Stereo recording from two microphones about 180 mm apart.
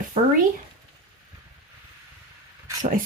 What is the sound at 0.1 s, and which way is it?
Speech, 30° right (ahead or behind).